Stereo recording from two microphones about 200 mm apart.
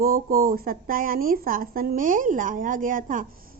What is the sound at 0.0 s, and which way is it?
Speech, 45° right (ahead or behind).